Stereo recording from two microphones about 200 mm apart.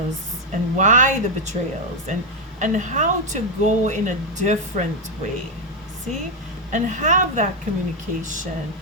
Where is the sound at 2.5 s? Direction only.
40° right (ahead or behind).